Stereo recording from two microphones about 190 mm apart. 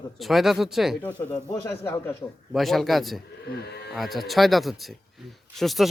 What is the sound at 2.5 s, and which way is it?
Speech, centre (ahead or behind).